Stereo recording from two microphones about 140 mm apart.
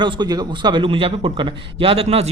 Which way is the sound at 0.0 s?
30° right (ahead or behind).